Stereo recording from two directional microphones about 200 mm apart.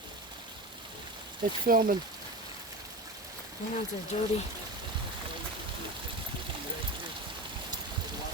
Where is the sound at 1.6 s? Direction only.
45° right (ahead or behind).